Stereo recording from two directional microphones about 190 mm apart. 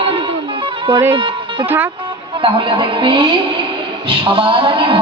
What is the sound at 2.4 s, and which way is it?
Speech, 25° right (ahead or behind).